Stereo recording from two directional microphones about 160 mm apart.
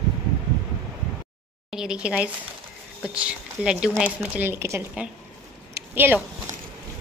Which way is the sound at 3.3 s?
5° right (ahead or behind).